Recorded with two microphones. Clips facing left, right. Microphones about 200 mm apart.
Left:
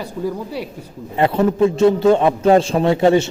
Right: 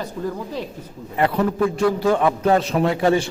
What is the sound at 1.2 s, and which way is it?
A man's voice, 25° left (ahead or behind).